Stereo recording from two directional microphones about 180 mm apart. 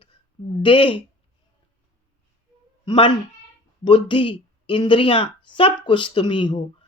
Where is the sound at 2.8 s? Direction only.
25° left (ahead or behind).